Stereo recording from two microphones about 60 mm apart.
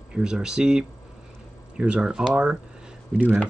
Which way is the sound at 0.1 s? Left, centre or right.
Centre.